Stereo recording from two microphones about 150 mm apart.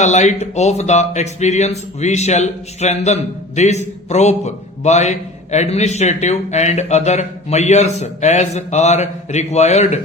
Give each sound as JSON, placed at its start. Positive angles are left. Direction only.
{"t": 0.0, "sound": "speech", "side_deg": 50}